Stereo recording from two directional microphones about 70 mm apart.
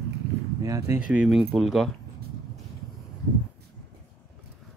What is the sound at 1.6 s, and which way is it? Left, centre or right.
Speech, centre.